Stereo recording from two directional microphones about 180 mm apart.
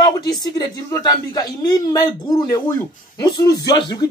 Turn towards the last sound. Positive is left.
turn(degrees=20)  # may be behind; listen again after turning